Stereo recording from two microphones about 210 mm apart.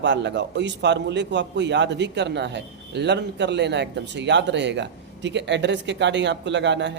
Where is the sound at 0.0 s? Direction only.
55° right (ahead or behind).